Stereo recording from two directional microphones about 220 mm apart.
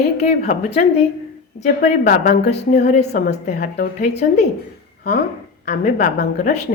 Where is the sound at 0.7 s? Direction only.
30° left (ahead or behind).